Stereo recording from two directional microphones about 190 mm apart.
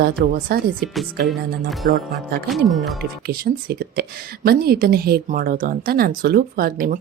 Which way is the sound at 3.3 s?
55° right (ahead or behind).